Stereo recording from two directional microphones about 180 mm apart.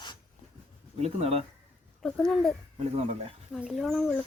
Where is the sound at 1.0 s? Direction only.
35° right (ahead or behind).